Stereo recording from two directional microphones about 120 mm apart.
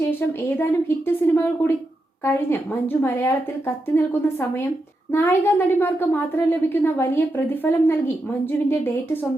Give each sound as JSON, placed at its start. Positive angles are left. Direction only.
{"t": 0.0, "sound": "a woman's voice", "side_deg": 20}